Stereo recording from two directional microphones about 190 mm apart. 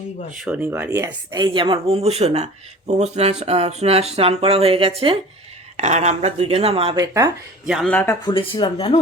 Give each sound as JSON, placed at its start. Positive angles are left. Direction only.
{"t": 0.3, "sound": "speech", "side_deg": -5}
{"t": 7.0, "sound": "speech", "side_deg": -15}
{"t": 7.7, "sound": "speech", "side_deg": 5}
{"t": 8.2, "sound": "speech", "side_deg": 25}